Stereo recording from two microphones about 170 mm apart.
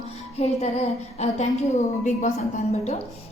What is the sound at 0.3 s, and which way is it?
A woman's voice, 40° left (ahead or behind).